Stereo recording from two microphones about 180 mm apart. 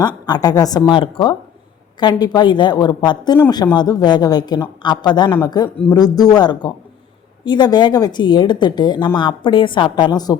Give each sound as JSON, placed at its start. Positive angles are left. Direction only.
{"t": 0.3, "sound": "speech", "side_deg": 20}